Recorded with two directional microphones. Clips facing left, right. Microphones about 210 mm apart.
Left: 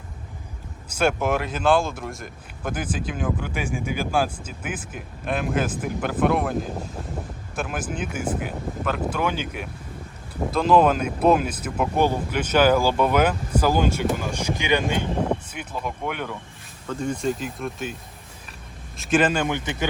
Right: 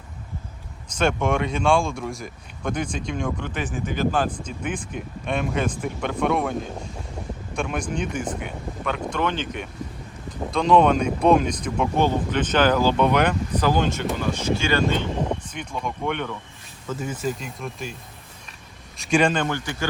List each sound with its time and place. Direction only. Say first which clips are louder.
0.9 s speech: even; 5° left (ahead or behind)
16.9 s speech: left 2 dB; 5° right (ahead or behind)
18.9 s speech: even; centre (ahead or behind)
19.5 s speech: left 2 dB; 20° left (ahead or behind)